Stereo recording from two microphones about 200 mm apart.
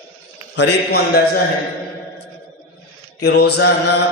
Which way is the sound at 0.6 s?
55° left (ahead or behind).